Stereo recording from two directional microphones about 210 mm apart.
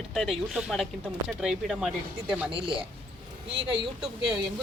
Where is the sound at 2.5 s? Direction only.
25° right (ahead or behind).